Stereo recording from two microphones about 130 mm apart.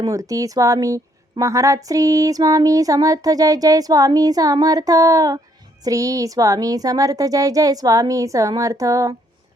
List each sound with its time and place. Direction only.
0.0 s a woman's voice: 25° right (ahead or behind)